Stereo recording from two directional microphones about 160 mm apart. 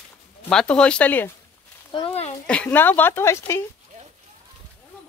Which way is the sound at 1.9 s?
30° left (ahead or behind).